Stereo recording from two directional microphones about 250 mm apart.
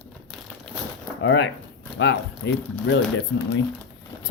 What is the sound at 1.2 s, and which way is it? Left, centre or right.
Speech, left.